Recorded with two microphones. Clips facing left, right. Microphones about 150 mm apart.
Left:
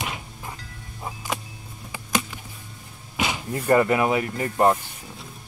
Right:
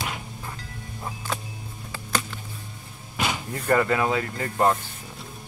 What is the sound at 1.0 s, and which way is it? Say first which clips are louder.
Music: left 1 dB; 15° left (ahead or behind).